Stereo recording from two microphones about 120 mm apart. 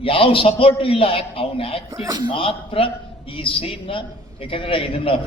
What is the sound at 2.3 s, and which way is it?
A man's voice, 50° left (ahead or behind).